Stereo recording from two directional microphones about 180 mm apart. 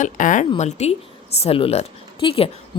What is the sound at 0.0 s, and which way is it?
Speech, 45° left (ahead or behind).